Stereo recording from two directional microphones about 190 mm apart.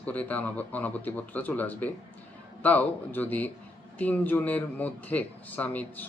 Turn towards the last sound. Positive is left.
turn(degrees=10)  # may be behind; listen again after turning